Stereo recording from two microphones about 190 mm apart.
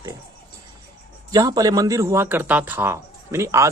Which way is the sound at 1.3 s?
20° right (ahead or behind).